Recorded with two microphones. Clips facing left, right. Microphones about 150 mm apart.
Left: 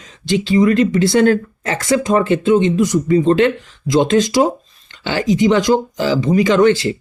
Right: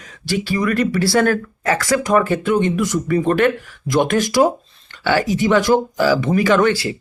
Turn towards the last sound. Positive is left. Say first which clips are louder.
# left 3 dB
turn(degrees=25)  # may be behind; listen again after turning